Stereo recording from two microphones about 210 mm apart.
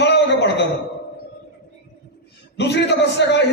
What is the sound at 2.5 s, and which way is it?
Speech, 55° left (ahead or behind).